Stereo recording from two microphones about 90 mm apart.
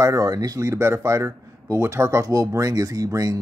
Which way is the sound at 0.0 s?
40° right (ahead or behind).